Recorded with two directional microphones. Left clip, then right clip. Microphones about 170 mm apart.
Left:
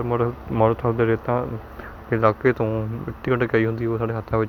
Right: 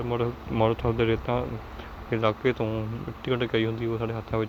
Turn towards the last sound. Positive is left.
turn(degrees=35)  # may be behind; listen again after turning